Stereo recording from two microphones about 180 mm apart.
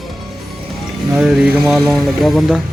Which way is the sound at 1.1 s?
5° right (ahead or behind).